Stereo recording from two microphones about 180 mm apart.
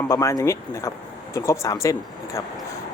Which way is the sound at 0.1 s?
15° left (ahead or behind).